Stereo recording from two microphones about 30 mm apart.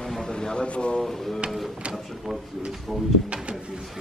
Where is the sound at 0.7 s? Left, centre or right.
Left.